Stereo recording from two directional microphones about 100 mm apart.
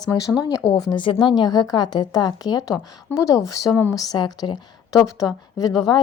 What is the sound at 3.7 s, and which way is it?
Speech, 20° left (ahead or behind).